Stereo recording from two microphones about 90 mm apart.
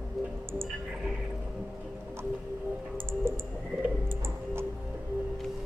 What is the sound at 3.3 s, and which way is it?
Typing, 25° right (ahead or behind).